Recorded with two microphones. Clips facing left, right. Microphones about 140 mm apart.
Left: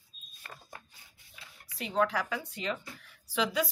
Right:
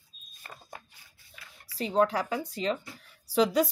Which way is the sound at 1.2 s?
20° left (ahead or behind).